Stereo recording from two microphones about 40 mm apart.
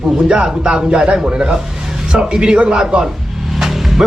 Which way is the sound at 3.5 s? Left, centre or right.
Centre.